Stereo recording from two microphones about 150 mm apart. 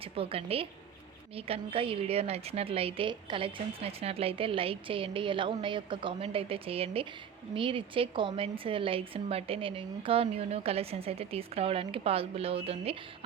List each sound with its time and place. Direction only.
0.0 s a woman's voice: 40° right (ahead or behind)